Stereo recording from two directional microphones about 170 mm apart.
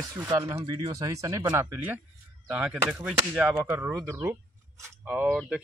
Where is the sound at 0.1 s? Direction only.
20° right (ahead or behind).